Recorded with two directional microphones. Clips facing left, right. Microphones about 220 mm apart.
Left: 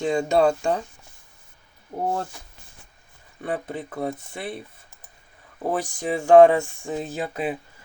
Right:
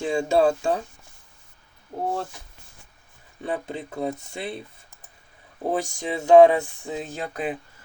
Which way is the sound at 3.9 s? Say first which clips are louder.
Right 1 dB; 20° right (ahead or behind).